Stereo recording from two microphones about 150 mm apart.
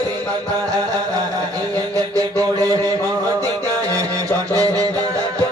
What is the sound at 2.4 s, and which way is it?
Mantra, 20° right (ahead or behind).